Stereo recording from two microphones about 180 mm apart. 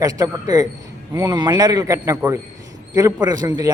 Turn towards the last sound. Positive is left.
turn(degrees=-20)  # may be behind; listen again after turning